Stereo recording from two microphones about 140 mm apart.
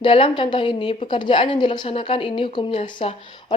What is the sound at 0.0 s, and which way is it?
A woman's voice, 40° left (ahead or behind).